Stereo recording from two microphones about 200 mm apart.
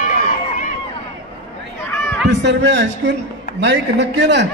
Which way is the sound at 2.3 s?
60° right (ahead or behind).